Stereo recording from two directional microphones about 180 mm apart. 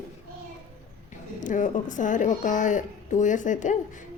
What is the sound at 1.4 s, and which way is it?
A woman's voice, 45° left (ahead or behind).